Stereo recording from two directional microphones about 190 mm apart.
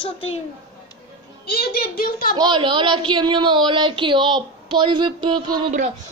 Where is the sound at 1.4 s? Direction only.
55° left (ahead or behind).